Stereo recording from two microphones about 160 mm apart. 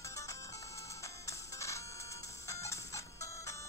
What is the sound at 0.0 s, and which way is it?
Music, 20° left (ahead or behind).